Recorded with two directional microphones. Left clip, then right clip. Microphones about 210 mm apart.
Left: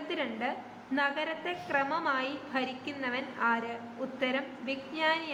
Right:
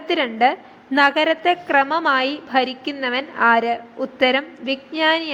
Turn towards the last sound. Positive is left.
turn(degrees=-35)  # may be behind; listen again after turning